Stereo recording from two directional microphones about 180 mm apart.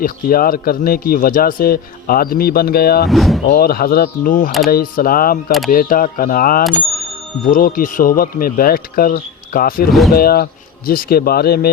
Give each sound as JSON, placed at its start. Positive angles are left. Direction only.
{"t": 0.0, "sound": "speech", "side_deg": 55}
{"t": 3.1, "sound": "speech", "side_deg": 0}
{"t": 3.4, "sound": "speech", "side_deg": 55}
{"t": 5.5, "sound": "speech", "side_deg": 0}
{"t": 5.7, "sound": "speech", "side_deg": 50}